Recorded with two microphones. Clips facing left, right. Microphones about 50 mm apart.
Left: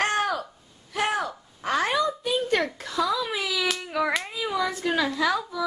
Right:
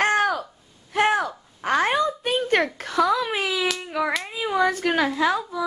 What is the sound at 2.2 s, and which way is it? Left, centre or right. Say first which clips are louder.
Whimper: right 3 dB; right.